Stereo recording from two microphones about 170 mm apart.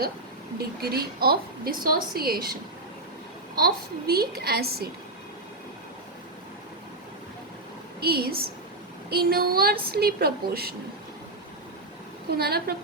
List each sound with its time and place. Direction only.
0.8 s a woman's voice: 65° right (ahead or behind)
8.0 s a woman's voice: 65° right (ahead or behind)
12.3 s a woman's voice: 65° right (ahead or behind)